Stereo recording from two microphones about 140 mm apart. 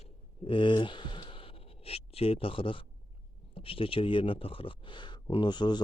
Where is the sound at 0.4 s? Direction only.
35° left (ahead or behind).